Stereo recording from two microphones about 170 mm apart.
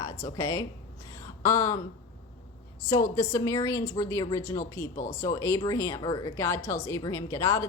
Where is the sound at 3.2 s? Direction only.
20° left (ahead or behind).